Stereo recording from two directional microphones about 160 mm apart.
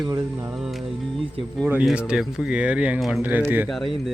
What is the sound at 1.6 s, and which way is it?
Speech, 10° right (ahead or behind).